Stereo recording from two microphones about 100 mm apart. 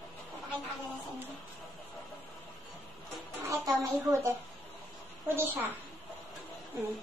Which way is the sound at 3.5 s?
30° right (ahead or behind).